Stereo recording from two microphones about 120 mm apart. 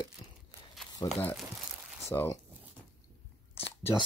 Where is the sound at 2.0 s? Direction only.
20° left (ahead or behind).